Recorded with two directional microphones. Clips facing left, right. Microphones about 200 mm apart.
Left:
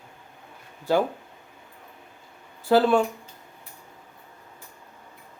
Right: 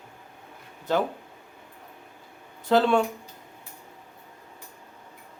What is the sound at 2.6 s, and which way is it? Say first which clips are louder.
Speech: left 2 dB; 5° left (ahead or behind).